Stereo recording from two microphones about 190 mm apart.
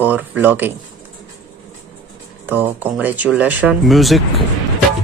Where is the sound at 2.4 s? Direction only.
10° right (ahead or behind).